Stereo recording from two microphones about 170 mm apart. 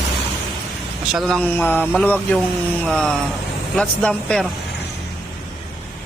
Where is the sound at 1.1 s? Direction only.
Centre (ahead or behind).